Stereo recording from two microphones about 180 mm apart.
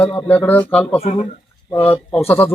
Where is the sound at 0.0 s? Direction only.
10° left (ahead or behind).